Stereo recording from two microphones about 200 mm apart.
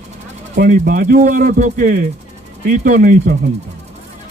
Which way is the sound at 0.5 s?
50° right (ahead or behind).